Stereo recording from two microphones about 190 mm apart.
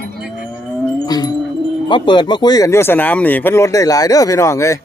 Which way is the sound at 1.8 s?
25° left (ahead or behind).